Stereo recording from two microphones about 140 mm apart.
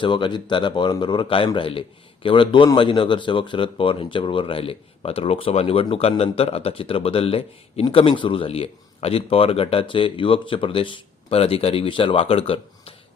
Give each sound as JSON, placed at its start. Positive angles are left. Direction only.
{"t": 0.0, "sound": "speech", "side_deg": 35}